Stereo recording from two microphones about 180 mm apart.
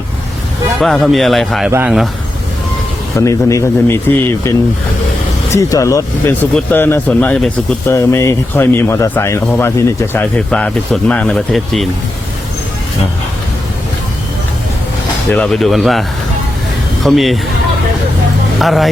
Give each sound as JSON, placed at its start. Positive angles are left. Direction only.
{"t": 0.8, "sound": "a man's voice", "side_deg": 0}
{"t": 3.2, "sound": "speech", "side_deg": 15}
{"t": 7.9, "sound": "speech", "side_deg": 15}
{"t": 15.3, "sound": "a man's voice", "side_deg": 5}
{"t": 18.6, "sound": "a man's voice", "side_deg": 0}